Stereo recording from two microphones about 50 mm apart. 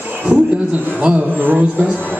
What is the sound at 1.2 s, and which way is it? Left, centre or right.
Speech, right.